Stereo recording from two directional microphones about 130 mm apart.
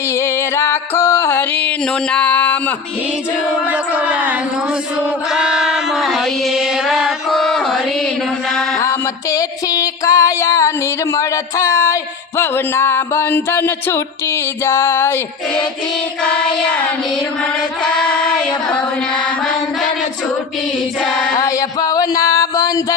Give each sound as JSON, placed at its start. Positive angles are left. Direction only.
{"t": 0.1, "sound": "music", "side_deg": 20}
{"t": 3.7, "sound": "a sound", "side_deg": -10}
{"t": 5.3, "sound": "chant", "side_deg": -5}
{"t": 8.8, "sound": "music", "side_deg": 25}
{"t": 11.1, "sound": "a sound", "side_deg": 25}
{"t": 16.2, "sound": "music", "side_deg": 10}
{"t": 21.3, "sound": "music", "side_deg": 25}